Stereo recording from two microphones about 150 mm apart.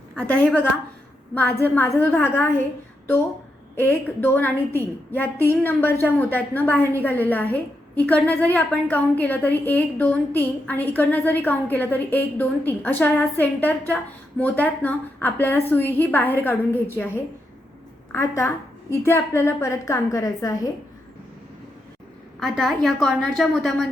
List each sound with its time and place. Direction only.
0.2 s a woman's voice: 10° left (ahead or behind)
3.8 s a woman's voice: 15° left (ahead or behind)
22.4 s a woman's voice: centre (ahead or behind)